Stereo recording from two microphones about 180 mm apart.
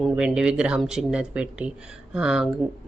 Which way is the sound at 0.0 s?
5° right (ahead or behind).